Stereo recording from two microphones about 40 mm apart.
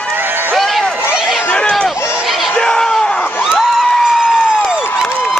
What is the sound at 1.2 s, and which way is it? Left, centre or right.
Run, centre.